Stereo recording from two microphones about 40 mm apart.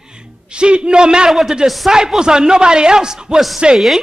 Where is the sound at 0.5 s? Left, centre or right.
Right.